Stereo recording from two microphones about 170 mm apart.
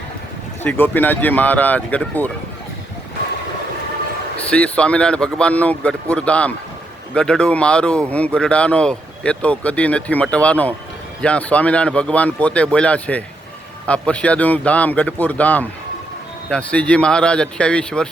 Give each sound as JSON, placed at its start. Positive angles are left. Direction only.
{"t": 0.6, "sound": "speech", "side_deg": 10}
{"t": 4.4, "sound": "speech", "side_deg": 10}